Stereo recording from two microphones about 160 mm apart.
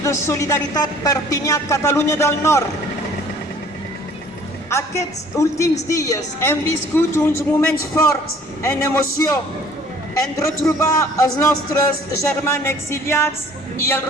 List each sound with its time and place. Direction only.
0.0 s speech: 20° left (ahead or behind)
4.7 s a woman's voice: 20° left (ahead or behind)